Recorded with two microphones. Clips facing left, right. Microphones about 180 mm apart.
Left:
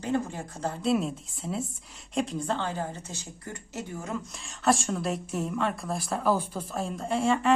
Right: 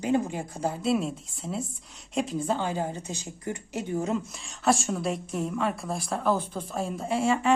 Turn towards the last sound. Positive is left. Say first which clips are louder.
# even
turn(degrees=0)  # may be behind; listen again after turning